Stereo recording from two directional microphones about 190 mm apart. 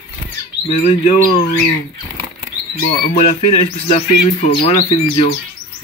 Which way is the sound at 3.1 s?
35° left (ahead or behind).